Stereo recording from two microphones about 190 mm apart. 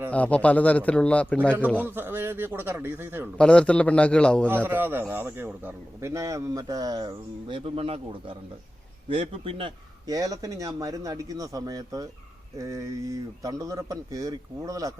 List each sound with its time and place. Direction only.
0.1 s a man's voice: 5° left (ahead or behind)
1.8 s a man's voice: 10° right (ahead or behind)
3.3 s a man's voice: 5° left (ahead or behind)
4.4 s a man's voice: 10° right (ahead or behind)